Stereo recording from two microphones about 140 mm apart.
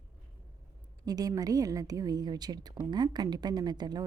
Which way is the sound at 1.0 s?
25° right (ahead or behind).